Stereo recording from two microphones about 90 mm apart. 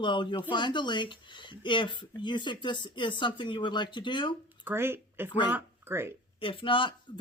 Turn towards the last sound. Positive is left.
turn(degrees=65)  # may be behind; listen again after turning